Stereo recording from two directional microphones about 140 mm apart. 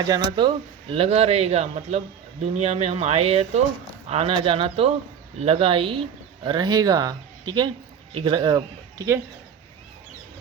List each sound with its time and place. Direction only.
0.3 s speech: 40° right (ahead or behind)